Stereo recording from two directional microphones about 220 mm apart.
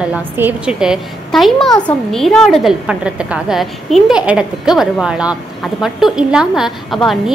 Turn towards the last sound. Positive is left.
turn(degrees=0)  # may be behind; listen again after turning